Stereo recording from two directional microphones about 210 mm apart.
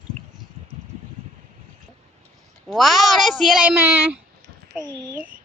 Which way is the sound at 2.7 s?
Centre (ahead or behind).